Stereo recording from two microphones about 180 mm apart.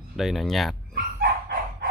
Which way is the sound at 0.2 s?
Centre (ahead or behind).